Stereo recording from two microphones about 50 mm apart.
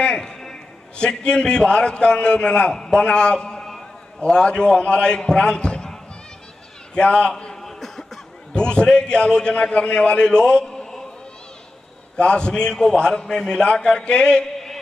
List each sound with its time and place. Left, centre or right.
0.0 s a man's voice: centre
4.2 s a man's voice: centre
7.0 s a man's voice: centre
7.6 s cough: centre
8.5 s a man's voice: centre
12.2 s a man's voice: centre